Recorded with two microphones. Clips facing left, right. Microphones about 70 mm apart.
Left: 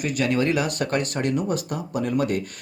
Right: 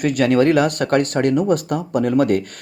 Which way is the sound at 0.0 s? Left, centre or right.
Right.